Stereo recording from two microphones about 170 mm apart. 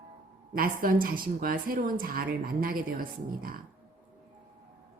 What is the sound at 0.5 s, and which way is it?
Speech, 55° right (ahead or behind).